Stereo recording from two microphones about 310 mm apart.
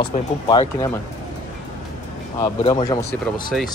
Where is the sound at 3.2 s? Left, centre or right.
Centre.